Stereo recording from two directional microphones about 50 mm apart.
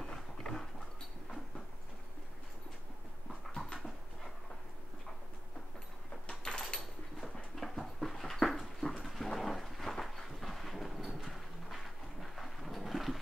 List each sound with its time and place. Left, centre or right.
0.0 s dog: centre
3.5 s dog: centre
6.2 s door: centre
7.5 s dog: centre